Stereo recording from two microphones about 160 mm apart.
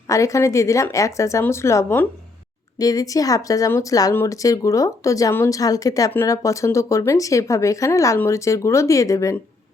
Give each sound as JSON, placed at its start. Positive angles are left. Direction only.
{"t": 0.1, "sound": "speech", "side_deg": 20}